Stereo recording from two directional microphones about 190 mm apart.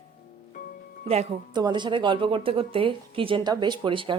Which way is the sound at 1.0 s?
35° right (ahead or behind).